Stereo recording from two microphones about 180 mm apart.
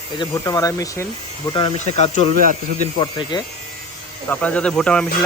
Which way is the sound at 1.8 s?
40° left (ahead or behind).